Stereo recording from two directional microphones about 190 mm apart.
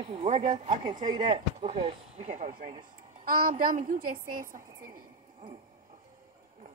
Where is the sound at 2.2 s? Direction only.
40° right (ahead or behind).